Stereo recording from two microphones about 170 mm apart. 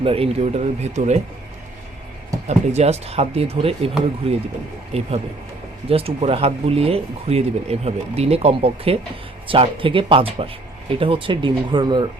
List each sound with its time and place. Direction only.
0.0 s speech: 35° right (ahead or behind)
2.5 s speech: 40° right (ahead or behind)